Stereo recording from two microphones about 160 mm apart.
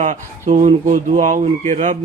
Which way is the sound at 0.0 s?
50° right (ahead or behind).